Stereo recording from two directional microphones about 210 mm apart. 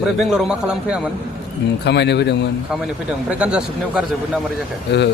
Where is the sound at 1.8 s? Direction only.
55° left (ahead or behind).